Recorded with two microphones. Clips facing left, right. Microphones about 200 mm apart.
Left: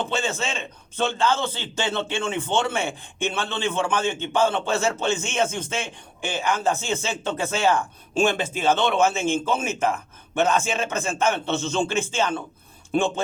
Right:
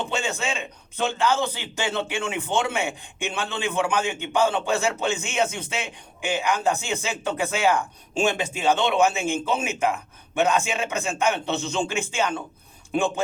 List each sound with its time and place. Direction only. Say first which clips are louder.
0.1 s a man's voice: left 1 dB; 15° right (ahead or behind)